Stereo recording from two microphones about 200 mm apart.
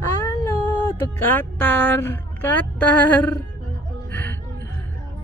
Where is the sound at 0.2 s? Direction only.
10° left (ahead or behind).